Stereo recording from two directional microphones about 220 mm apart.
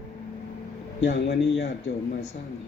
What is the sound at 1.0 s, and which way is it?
Speech, 50° left (ahead or behind).